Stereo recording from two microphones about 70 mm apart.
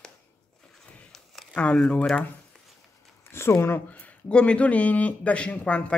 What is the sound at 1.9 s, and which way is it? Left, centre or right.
Speech, centre.